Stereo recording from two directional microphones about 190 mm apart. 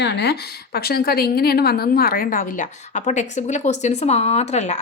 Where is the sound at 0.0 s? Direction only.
60° left (ahead or behind).